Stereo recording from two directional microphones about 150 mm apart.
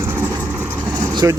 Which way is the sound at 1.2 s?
20° right (ahead or behind).